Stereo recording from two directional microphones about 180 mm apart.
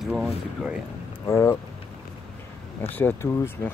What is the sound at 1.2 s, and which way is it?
Speech, 15° left (ahead or behind).